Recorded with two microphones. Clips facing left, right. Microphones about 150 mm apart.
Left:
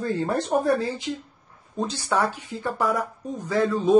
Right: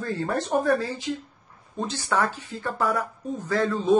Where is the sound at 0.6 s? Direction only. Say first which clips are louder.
Left 1 dB; 25° left (ahead or behind).